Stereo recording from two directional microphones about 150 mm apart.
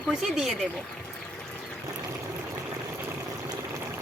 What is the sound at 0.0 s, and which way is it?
Speech, centre (ahead or behind).